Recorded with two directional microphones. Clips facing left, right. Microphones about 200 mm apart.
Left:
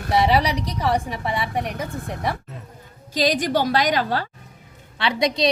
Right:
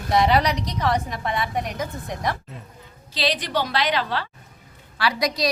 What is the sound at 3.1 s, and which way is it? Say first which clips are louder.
A woman's voice: left 4 dB; 45° left (ahead or behind).